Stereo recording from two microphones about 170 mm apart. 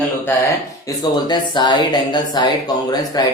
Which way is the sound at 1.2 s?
25° left (ahead or behind).